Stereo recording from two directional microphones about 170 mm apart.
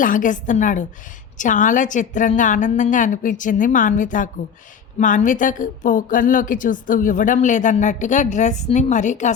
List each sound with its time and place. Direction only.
0.0 s a woman's voice: 50° left (ahead or behind)